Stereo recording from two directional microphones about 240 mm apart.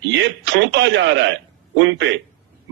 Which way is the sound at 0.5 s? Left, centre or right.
Right.